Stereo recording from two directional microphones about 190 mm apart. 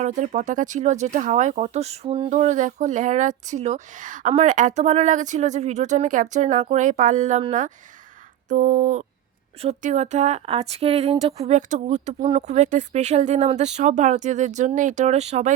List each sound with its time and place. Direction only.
0.0 s speech: 40° right (ahead or behind)